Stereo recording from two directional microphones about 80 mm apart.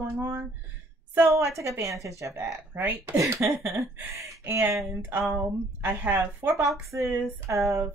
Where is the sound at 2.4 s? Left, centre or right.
Right.